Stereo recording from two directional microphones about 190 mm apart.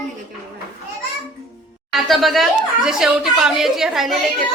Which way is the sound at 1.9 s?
Centre (ahead or behind).